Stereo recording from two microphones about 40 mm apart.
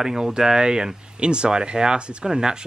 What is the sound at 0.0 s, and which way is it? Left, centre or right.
Speech, centre.